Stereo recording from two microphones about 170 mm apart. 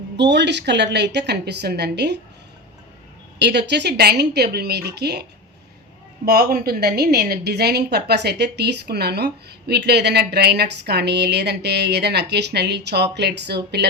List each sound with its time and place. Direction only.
0.2 s a woman's voice: 90° right
3.3 s a woman's voice: 80° right
6.2 s a woman's voice: 65° right (ahead or behind); by 13.6 s 80° right